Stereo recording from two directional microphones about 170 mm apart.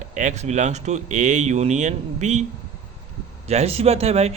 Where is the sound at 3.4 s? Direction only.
40° right (ahead or behind).